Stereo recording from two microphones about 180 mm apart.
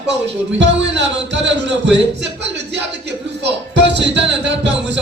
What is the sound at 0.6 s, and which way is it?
Speech, 80° right.